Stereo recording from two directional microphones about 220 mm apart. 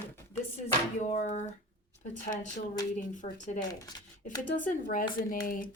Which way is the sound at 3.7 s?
15° left (ahead or behind).